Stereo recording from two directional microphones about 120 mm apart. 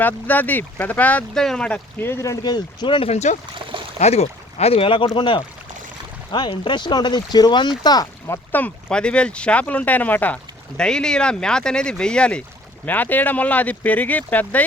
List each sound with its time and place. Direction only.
0.0 s speech: 15° left (ahead or behind); by 3.1 s 40° left (ahead or behind)
3.1 s speech: 65° left (ahead or behind); by 8.4 s 30° left (ahead or behind)
8.5 s speech: 10° left (ahead or behind)